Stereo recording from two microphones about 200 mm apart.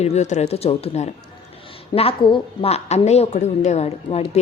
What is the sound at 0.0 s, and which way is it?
A woman's voice, 35° left (ahead or behind).